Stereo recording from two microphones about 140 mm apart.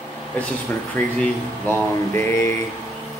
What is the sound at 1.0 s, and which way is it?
A man's voice, 10° left (ahead or behind).